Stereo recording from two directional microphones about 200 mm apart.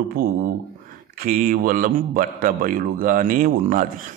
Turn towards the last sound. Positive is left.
turn(degrees=-40)  # may be behind; listen again after turning